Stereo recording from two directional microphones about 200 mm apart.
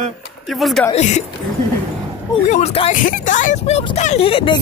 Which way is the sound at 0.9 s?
35° left (ahead or behind).